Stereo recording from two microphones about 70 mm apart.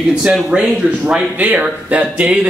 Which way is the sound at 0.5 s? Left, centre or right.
Centre.